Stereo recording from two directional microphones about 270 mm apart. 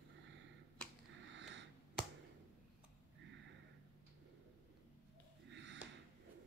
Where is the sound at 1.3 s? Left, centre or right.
Right.